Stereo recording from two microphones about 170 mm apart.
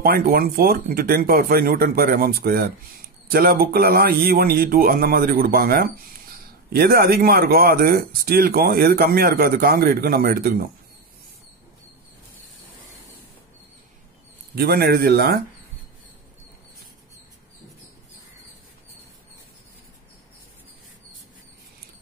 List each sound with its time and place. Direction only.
0.0 s speech: 60° right (ahead or behind)
14.5 s speech: 65° right (ahead or behind)